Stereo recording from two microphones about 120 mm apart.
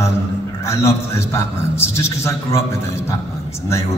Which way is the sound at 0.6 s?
25° left (ahead or behind).